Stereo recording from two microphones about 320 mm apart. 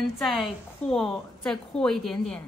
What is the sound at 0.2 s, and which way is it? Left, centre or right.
A woman's voice, centre.